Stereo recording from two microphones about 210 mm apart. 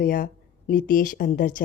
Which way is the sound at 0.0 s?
40° left (ahead or behind).